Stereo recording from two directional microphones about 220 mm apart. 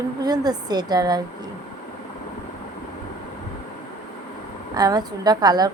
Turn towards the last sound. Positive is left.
turn(degrees=-20)  # may be behind; listen again after turning